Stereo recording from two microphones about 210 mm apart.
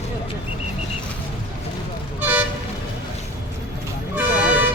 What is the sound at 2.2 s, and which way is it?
Toot, 5° right (ahead or behind).